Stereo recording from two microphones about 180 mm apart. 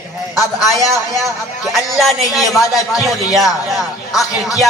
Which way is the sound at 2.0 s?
Centre (ahead or behind).